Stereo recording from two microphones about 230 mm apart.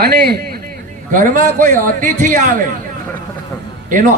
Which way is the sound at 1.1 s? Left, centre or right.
Right.